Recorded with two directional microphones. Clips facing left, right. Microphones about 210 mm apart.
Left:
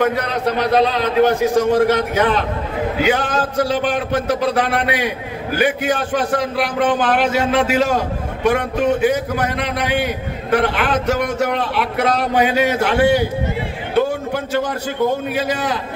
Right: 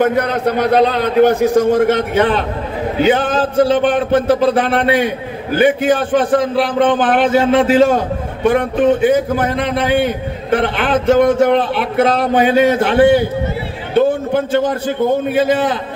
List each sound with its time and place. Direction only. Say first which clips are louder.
0.0 s a man's voice: right 4 dB; 55° right (ahead or behind)
1.8 s speech: right 2 dB; 25° right (ahead or behind)
13.9 s music: right 5 dB; 25° right (ahead or behind)
15.3 s speech: right 7 dB; 25° right (ahead or behind)